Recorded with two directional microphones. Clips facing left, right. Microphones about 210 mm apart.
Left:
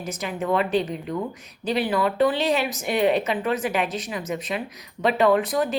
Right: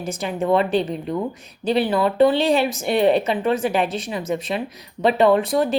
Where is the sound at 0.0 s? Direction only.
30° right (ahead or behind).